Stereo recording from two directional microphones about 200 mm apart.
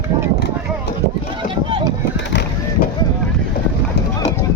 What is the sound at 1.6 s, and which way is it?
Vehicle, 25° right (ahead or behind).